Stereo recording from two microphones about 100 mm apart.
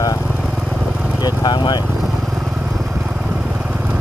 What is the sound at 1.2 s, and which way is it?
Speech, 45° left (ahead or behind).